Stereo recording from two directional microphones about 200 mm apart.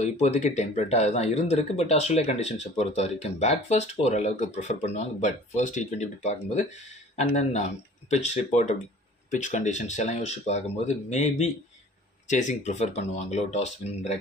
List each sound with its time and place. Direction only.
0.0 s speech: 35° left (ahead or behind)